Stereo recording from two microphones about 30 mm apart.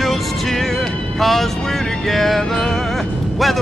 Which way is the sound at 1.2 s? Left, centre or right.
Centre.